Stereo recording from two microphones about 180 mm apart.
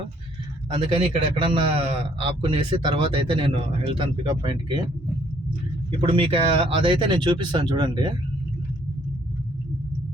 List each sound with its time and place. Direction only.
0.7 s a man's voice: 30° right (ahead or behind)
6.0 s a man's voice: 30° right (ahead or behind)